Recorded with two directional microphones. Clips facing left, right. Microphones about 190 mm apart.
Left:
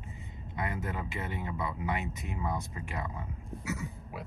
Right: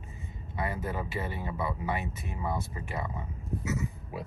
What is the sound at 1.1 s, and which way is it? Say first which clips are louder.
Speech: right 2 dB; 20° left (ahead or behind).